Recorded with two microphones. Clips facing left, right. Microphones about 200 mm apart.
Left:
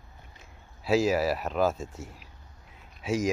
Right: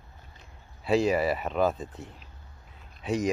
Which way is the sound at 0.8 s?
5° left (ahead or behind).